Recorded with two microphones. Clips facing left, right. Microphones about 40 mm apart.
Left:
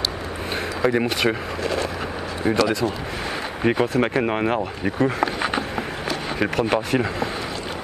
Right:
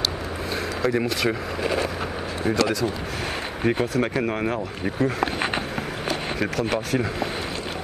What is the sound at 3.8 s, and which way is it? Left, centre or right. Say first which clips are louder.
Speech: left 3 dB; left.